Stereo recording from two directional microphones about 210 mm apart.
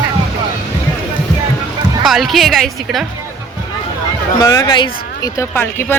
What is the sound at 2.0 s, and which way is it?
A woman's voice, centre (ahead or behind).